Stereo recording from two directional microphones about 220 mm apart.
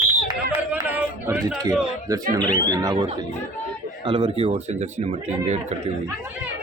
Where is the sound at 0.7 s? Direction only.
5° right (ahead or behind).